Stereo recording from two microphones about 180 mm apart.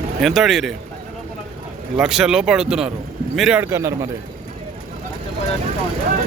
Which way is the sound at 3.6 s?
15° right (ahead or behind).